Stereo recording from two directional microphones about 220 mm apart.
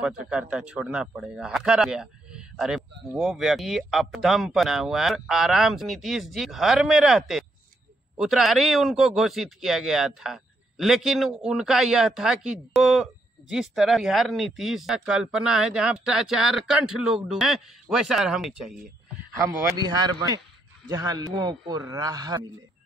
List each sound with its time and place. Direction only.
0.0 s speech: 5° right (ahead or behind)
19.4 s speech: 15° right (ahead or behind)